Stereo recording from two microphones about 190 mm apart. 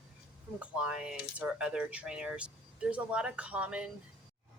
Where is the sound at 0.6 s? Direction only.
5° right (ahead or behind).